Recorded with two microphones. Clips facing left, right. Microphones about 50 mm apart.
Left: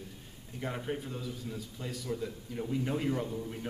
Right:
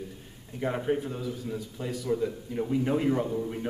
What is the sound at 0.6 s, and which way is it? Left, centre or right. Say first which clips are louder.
Speech: right 8 dB; centre.